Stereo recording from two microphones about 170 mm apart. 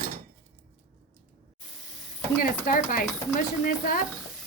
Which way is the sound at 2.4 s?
55° left (ahead or behind).